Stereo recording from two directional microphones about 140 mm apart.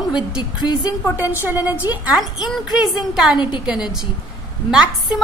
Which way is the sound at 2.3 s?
Centre (ahead or behind).